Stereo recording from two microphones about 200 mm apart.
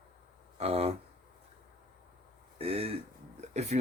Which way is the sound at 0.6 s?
30° right (ahead or behind).